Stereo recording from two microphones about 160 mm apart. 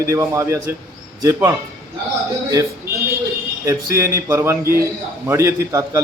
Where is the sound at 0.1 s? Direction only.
20° right (ahead or behind).